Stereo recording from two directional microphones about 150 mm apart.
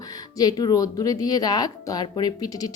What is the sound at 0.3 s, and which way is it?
Speech, 25° left (ahead or behind).